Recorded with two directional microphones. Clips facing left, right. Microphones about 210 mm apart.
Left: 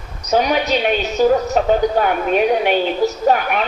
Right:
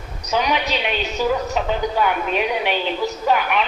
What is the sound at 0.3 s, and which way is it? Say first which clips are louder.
A woman's voice: left 5 dB; 45° left (ahead or behind).